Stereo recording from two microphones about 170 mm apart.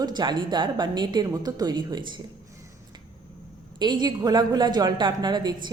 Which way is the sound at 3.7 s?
25° right (ahead or behind).